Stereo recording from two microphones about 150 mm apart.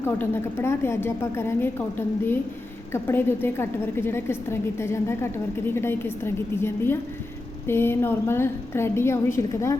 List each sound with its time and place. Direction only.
0.0 s a woman's voice: 15° left (ahead or behind)